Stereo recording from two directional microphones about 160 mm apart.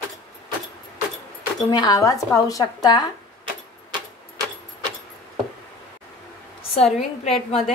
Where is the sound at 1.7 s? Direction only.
25° left (ahead or behind).